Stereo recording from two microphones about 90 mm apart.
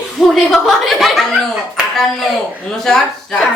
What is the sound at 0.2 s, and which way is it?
Speech, 5° right (ahead or behind).